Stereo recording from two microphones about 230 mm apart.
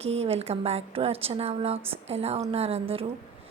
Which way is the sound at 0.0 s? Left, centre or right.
Right.